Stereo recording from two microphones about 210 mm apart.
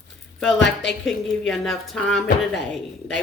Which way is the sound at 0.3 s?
Centre (ahead or behind).